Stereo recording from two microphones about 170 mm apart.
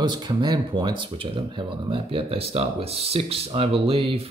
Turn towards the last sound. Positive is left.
turn(degrees=-35)  # may be behind; listen again after turning